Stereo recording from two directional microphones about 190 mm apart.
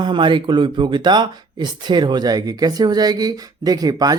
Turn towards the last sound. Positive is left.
turn(degrees=-20)  # may be behind; listen again after turning